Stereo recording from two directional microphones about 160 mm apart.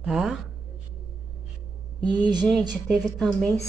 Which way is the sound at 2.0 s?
25° right (ahead or behind).